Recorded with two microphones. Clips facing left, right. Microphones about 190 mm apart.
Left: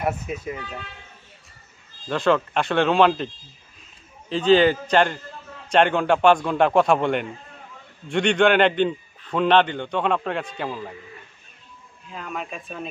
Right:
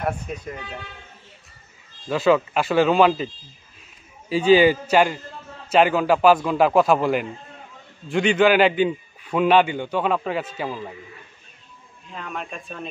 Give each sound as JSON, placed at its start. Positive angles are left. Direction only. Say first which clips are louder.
{"t": 0.0, "sound": "a man's voice", "louder": "left 1 dB", "side_deg": 5}
{"t": 2.0, "sound": "a man's voice", "louder": "right 2 dB", "side_deg": -5}
{"t": 4.3, "sound": "a man's voice", "louder": "right 1 dB", "side_deg": -10}
{"t": 12.1, "sound": "a man's voice", "louder": "even", "side_deg": 0}